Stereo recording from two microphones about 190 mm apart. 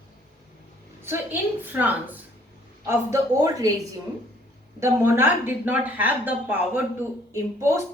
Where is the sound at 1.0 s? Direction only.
10° right (ahead or behind).